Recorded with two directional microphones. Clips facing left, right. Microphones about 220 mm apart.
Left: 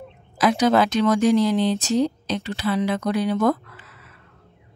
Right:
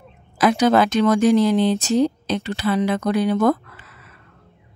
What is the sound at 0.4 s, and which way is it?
Speech, 55° right (ahead or behind).